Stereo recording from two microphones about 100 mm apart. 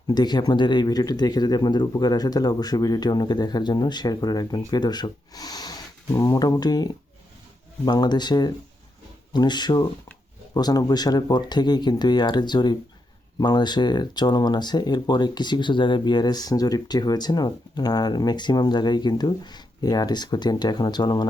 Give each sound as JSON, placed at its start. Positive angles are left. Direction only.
{"t": 0.1, "sound": "speech", "side_deg": 45}